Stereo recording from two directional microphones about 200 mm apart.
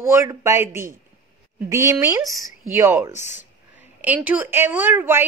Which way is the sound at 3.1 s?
35° left (ahead or behind).